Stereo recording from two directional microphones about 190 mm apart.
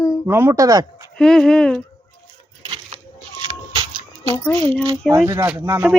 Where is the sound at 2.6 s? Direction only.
30° right (ahead or behind).